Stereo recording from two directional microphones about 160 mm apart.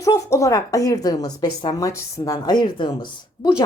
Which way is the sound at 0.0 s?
20° left (ahead or behind).